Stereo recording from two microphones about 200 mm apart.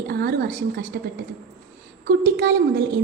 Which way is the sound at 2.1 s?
50° right (ahead or behind).